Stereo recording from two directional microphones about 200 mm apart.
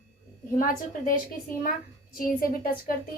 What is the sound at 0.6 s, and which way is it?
A woman's voice, 45° left (ahead or behind).